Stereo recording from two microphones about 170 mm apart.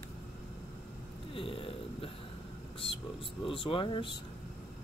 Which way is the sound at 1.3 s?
30° left (ahead or behind).